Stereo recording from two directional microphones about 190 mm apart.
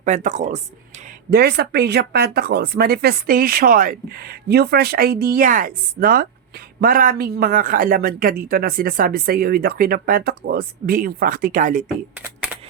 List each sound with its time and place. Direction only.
0.0 s speech: 40° right (ahead or behind)
1.3 s a man's voice: 55° right (ahead or behind)